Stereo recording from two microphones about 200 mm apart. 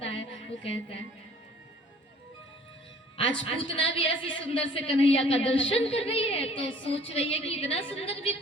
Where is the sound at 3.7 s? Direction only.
25° left (ahead or behind).